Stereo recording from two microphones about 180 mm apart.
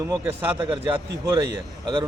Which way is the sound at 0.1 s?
10° right (ahead or behind).